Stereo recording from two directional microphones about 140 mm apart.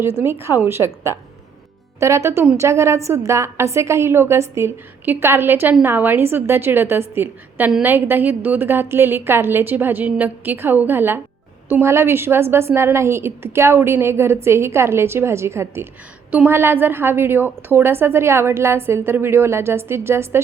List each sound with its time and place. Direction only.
0.0 s a woman's voice: 15° right (ahead or behind)